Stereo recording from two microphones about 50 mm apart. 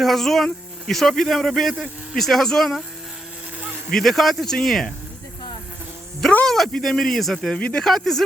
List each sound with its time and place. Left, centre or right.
0.0 s speech: centre
3.8 s speech: centre
6.4 s speech: centre
7.5 s speech: centre
7.9 s speech: centre